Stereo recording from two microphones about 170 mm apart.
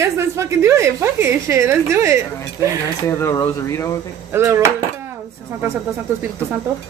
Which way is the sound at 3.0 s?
15° left (ahead or behind).